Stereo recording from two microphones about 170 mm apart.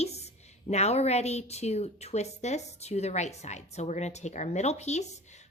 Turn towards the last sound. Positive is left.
turn(degrees=40)  # may be behind; listen again after turning